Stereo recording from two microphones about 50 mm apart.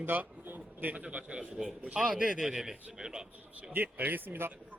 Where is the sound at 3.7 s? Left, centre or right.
Right.